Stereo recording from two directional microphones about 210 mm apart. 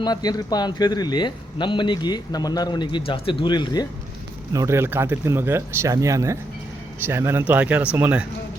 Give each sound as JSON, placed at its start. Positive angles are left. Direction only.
{"t": 0.0, "sound": "speech", "side_deg": 20}
{"t": 4.5, "sound": "speech", "side_deg": -15}